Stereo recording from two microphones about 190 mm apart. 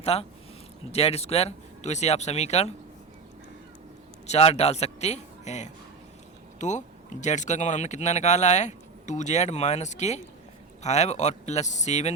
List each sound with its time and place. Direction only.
0.0 s speech: 30° left (ahead or behind)
4.3 s speech: 35° left (ahead or behind)